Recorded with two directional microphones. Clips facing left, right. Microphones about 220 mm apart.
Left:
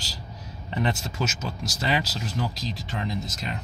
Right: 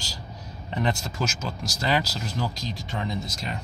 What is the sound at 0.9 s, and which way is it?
Speech, 5° left (ahead or behind).